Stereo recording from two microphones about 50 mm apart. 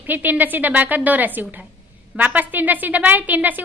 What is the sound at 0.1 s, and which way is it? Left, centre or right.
A woman's voice, right.